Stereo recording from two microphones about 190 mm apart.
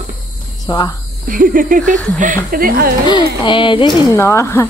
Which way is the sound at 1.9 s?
5° left (ahead or behind).